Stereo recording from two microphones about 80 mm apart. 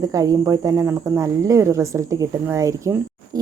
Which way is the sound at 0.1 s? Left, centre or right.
Right.